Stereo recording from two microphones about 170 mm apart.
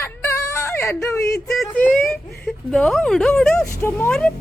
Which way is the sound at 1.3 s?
Centre (ahead or behind).